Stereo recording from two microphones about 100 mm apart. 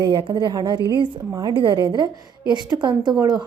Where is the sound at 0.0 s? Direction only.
55° right (ahead or behind).